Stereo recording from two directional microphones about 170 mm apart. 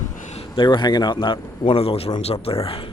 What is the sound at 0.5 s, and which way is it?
A man's voice, 25° left (ahead or behind).